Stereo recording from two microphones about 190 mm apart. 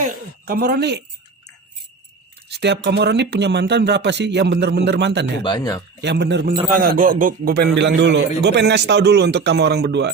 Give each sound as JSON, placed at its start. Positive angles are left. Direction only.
{"t": 0.0, "sound": "speech", "side_deg": -45}
{"t": 2.5, "sound": "a man's voice", "side_deg": -65}
{"t": 5.4, "sound": "speech", "side_deg": 20}
{"t": 6.0, "sound": "a man's voice", "side_deg": -65}
{"t": 6.7, "sound": "a man's voice", "side_deg": -45}